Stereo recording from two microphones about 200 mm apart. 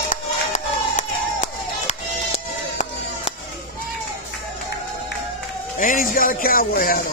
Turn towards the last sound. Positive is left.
turn(degrees=45)  # may be behind; listen again after turning